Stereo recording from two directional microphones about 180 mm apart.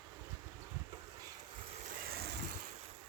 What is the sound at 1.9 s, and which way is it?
Vehicle, 65° right (ahead or behind).